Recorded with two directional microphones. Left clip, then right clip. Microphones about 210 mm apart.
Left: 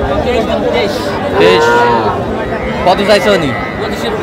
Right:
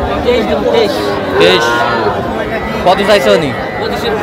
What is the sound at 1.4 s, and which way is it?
Speech, 5° right (ahead or behind).